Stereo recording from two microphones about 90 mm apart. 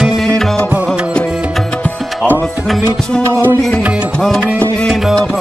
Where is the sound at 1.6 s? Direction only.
10° left (ahead or behind).